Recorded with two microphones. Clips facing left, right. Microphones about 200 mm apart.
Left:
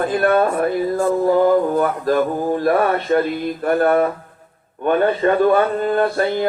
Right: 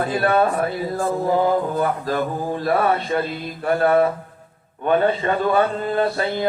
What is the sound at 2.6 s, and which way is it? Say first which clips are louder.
Speech: left 2 dB; 50° left (ahead or behind).